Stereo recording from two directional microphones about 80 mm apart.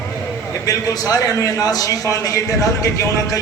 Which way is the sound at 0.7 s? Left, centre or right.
Left.